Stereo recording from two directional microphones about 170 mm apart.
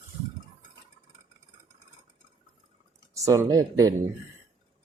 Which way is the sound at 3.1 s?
20° right (ahead or behind).